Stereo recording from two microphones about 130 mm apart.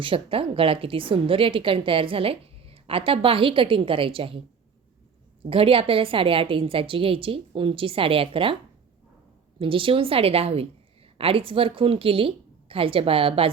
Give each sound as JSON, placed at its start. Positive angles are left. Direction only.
{"t": 0.0, "sound": "a woman's voice", "side_deg": -45}
{"t": 5.4, "sound": "a woman's voice", "side_deg": -45}
{"t": 9.6, "sound": "a woman's voice", "side_deg": -40}